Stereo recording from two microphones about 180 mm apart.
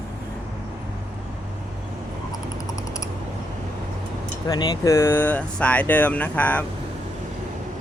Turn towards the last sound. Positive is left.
turn(degrees=10)  # may be behind; listen again after turning